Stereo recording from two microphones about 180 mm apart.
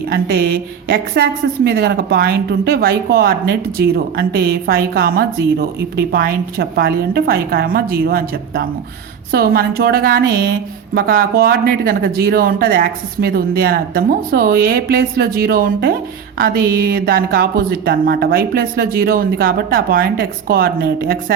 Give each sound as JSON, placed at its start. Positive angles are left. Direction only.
{"t": 0.1, "sound": "speech", "side_deg": -55}